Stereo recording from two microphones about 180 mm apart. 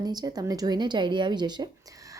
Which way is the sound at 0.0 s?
20° right (ahead or behind).